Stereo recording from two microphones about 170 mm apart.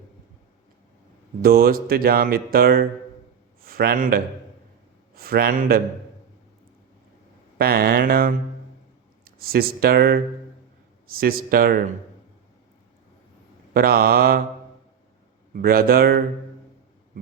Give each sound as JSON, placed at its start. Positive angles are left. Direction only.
{"t": 1.4, "sound": "a man's voice", "side_deg": -60}
{"t": 7.6, "sound": "speech", "side_deg": -65}
{"t": 13.7, "sound": "speech", "side_deg": -60}
{"t": 15.5, "sound": "speech", "side_deg": -60}